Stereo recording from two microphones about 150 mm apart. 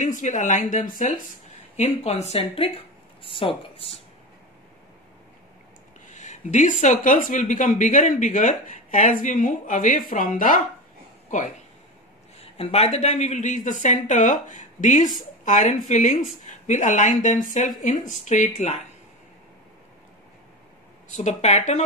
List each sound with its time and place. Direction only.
0.0 s speech: 55° left (ahead or behind)
1.8 s speech: 45° left (ahead or behind)
6.0 s speech: 55° left (ahead or behind)
12.4 s speech: 40° left (ahead or behind)
21.1 s speech: 50° left (ahead or behind)